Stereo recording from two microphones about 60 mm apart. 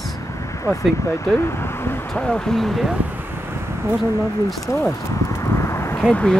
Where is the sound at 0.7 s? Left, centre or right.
Left.